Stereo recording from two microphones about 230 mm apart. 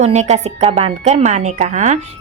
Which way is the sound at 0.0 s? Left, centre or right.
Right.